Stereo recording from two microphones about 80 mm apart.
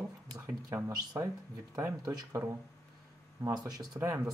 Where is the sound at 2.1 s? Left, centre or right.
Right.